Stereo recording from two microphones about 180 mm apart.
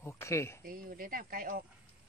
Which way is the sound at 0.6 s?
50° right (ahead or behind).